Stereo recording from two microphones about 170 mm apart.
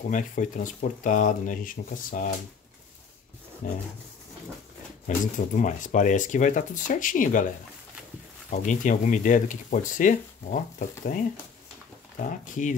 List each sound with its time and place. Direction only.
0.1 s speech: 50° left (ahead or behind)
3.6 s speech: 50° left (ahead or behind)
5.0 s speech: 50° left (ahead or behind)
8.5 s speech: 45° left (ahead or behind)